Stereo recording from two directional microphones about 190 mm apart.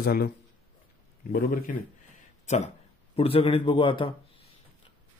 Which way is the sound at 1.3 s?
50° left (ahead or behind).